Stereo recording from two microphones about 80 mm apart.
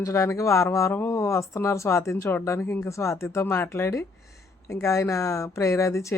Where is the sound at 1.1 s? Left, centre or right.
Left.